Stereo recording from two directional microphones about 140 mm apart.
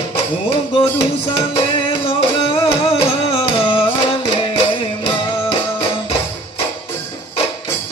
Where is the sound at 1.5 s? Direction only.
40° left (ahead or behind).